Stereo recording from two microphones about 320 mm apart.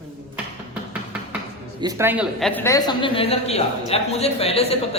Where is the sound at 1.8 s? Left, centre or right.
Centre.